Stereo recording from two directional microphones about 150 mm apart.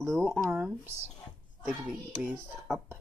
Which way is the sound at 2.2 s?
5° right (ahead or behind).